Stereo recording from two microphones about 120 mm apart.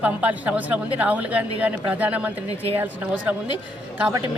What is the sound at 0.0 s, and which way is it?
Speech, 15° right (ahead or behind).